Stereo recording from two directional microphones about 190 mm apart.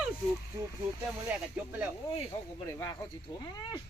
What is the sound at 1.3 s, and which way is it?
Speech, 10° right (ahead or behind).